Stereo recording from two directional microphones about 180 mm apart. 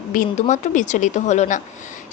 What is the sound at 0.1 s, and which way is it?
A woman's voice, 45° left (ahead or behind).